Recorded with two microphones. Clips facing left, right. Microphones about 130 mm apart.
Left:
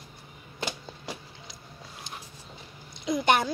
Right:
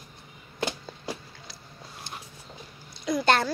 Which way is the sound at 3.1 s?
20° left (ahead or behind).